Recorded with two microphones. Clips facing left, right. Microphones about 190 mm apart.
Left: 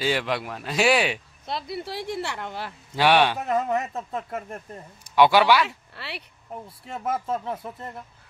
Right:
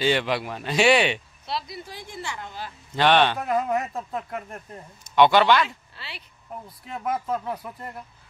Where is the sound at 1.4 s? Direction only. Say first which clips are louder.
Left 3 dB; 55° left (ahead or behind).